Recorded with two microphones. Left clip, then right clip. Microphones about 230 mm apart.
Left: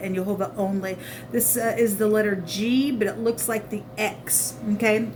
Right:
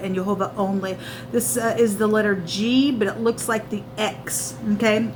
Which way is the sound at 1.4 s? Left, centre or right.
Left.